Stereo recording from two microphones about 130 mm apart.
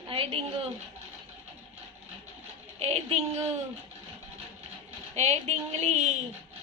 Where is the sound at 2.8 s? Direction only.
55° right (ahead or behind).